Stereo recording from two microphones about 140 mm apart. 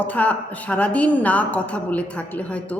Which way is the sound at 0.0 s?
10° left (ahead or behind).